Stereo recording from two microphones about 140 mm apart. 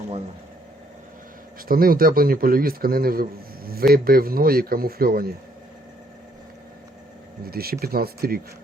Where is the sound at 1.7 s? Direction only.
90° right.